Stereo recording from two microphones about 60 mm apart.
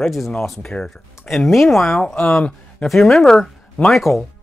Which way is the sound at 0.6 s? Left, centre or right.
Centre.